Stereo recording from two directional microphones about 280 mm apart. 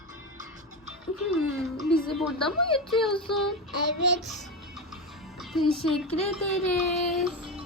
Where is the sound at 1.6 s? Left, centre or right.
Centre.